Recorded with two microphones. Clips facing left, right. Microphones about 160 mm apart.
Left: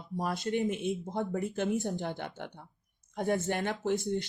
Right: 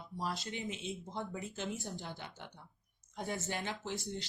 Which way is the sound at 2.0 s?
60° left (ahead or behind).